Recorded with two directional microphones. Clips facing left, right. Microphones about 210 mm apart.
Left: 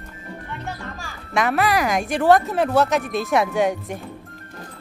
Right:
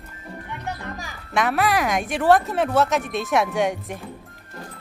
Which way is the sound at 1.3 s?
Centre (ahead or behind).